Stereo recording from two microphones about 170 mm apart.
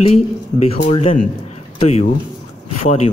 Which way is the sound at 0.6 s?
35° left (ahead or behind).